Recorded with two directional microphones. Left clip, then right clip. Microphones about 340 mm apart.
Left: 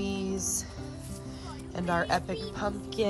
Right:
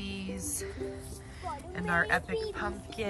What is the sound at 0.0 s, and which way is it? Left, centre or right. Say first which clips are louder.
Music: left 7 dB; centre.